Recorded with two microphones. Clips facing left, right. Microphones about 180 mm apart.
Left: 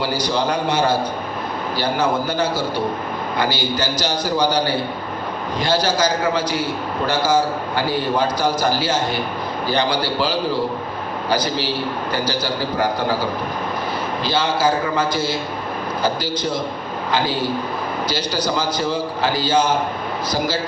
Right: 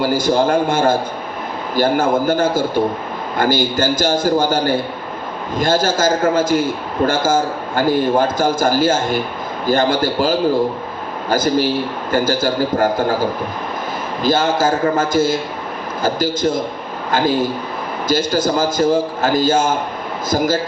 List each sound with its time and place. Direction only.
0.0 s a man's voice: 50° right (ahead or behind)
14.2 s a man's voice: 45° right (ahead or behind)